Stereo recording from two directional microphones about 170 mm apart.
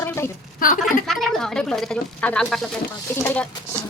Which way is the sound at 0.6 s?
55° left (ahead or behind).